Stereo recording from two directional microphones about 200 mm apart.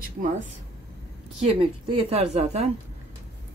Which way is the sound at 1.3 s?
30° right (ahead or behind).